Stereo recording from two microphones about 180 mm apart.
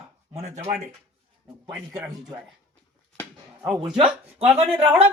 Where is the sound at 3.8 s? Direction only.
25° right (ahead or behind).